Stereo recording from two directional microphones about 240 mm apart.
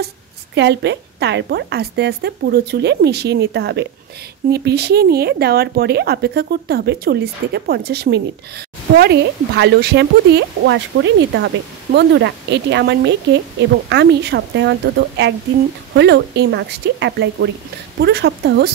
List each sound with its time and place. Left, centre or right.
0.6 s speech: right